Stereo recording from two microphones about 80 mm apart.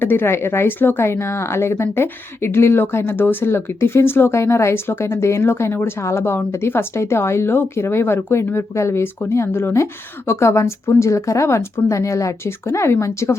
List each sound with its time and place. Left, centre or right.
0.0 s speech: left